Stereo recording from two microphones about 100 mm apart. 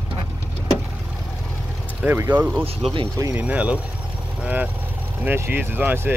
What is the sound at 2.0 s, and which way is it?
Speech, 20° right (ahead or behind).